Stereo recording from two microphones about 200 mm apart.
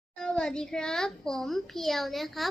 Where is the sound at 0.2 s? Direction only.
5° left (ahead or behind).